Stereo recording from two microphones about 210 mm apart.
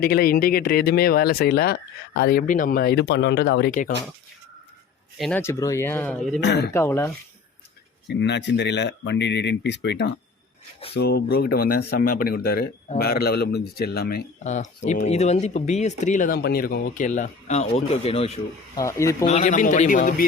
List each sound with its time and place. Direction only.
0.0 s speech: 45° left (ahead or behind)
5.1 s speech: centre (ahead or behind)
5.4 s speech: 15° left (ahead or behind)
6.4 s speech: 55° left (ahead or behind)
6.7 s speech: 10° left (ahead or behind)
8.0 s speech: 55° left (ahead or behind)
14.3 s speech: 35° left (ahead or behind)
18.8 s speech: 15° left (ahead or behind)
19.2 s speech: 35° left (ahead or behind)